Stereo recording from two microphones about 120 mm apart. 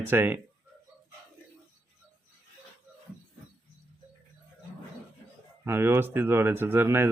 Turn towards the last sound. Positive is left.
turn(degrees=-20)  # may be behind; listen again after turning